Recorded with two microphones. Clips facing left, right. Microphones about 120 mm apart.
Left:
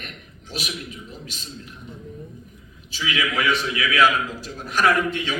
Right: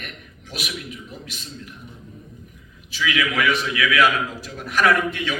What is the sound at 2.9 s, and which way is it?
A man's voice, 35° left (ahead or behind).